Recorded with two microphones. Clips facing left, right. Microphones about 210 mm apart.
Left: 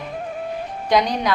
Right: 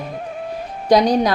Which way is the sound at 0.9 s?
40° right (ahead or behind).